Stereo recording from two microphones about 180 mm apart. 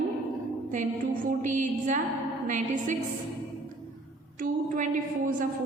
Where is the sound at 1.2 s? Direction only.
45° right (ahead or behind).